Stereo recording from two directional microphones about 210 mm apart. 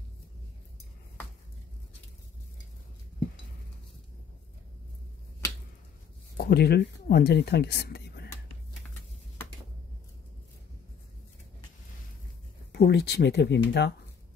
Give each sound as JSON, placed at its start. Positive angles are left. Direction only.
{"t": 6.3, "sound": "speech", "side_deg": 50}
{"t": 12.7, "sound": "speech", "side_deg": 50}